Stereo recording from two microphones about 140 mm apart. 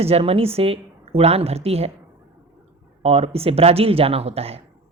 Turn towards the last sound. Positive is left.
turn(degrees=-45)  # may be behind; listen again after turning